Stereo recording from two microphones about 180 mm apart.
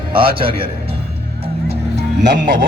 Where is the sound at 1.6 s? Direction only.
40° right (ahead or behind).